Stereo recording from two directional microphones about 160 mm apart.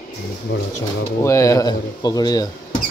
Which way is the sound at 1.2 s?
20° left (ahead or behind).